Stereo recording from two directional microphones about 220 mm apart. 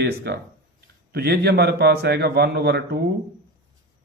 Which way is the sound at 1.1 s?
45° right (ahead or behind).